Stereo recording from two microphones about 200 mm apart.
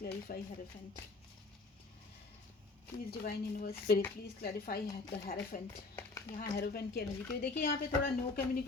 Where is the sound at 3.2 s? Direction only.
50° left (ahead or behind).